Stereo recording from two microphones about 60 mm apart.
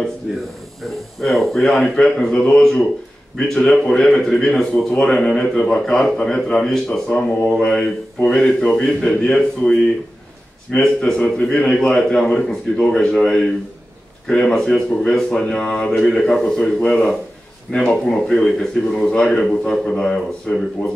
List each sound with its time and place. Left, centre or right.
1.2 s a man's voice: centre